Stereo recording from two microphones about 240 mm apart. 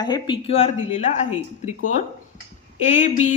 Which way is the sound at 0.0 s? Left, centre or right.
Centre.